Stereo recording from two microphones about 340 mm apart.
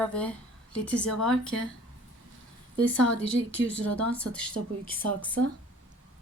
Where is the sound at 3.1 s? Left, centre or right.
Left.